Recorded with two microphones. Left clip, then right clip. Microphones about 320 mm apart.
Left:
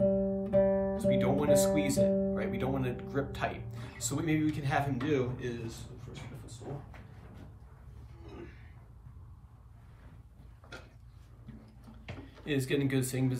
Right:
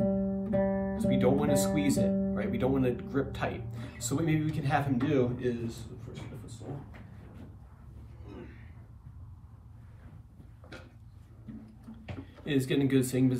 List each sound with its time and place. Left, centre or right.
0.1 s music: left
0.9 s guitar: centre
2.3 s speech: centre
12.4 s speech: centre